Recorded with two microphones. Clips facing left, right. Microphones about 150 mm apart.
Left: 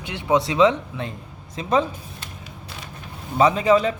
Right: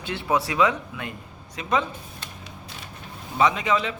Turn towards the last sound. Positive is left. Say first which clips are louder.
# left 5 dB
turn(degrees=40)  # may be behind; listen again after turning